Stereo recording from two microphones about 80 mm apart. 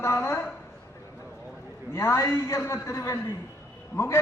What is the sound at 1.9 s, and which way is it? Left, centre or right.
A man's voice, left.